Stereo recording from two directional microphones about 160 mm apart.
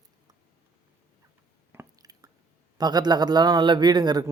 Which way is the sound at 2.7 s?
25° right (ahead or behind).